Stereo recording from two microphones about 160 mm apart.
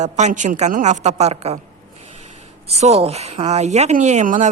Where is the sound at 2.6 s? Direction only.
40° right (ahead or behind).